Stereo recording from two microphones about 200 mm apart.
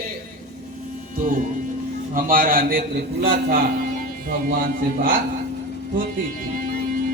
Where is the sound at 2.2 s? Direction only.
45° right (ahead or behind).